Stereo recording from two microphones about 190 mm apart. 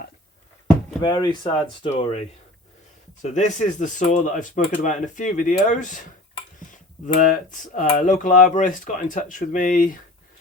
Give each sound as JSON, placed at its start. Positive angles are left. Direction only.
{"t": 1.0, "sound": "speech", "side_deg": 20}
{"t": 7.2, "sound": "speech", "side_deg": 45}